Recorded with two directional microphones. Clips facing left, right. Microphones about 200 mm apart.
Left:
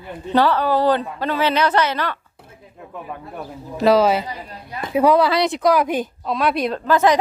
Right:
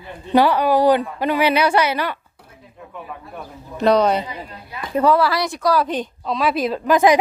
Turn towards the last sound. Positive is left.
turn(degrees=-15)  # may be behind; listen again after turning